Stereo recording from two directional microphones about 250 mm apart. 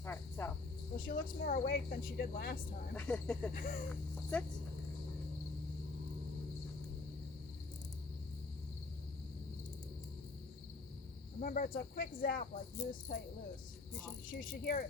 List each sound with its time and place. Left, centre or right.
0.0 s cricket: centre
0.9 s speech: left
2.9 s speech: centre
3.5 s speech: left
11.3 s speech: left
14.3 s speech: left